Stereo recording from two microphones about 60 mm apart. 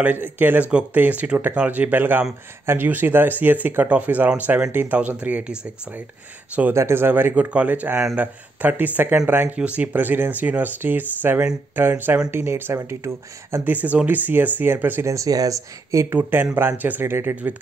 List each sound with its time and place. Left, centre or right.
0.0 s speech: right
2.6 s speech: right
6.7 s speech: right
7.3 s speech: right
12.7 s speech: right
13.7 s speech: right
15.0 s speech: right
16.1 s speech: right
17.0 s speech: right